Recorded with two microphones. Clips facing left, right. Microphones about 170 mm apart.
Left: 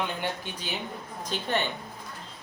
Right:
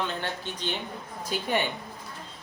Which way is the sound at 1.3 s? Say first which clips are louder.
Right 1 dB; 10° right (ahead or behind).